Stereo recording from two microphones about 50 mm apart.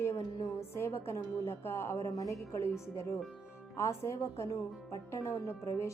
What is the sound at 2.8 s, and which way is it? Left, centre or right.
Speech, left.